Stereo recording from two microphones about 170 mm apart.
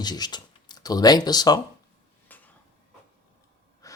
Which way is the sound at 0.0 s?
25° left (ahead or behind).